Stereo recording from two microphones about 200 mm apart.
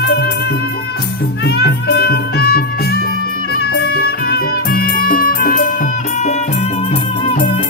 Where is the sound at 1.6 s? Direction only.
55° left (ahead or behind).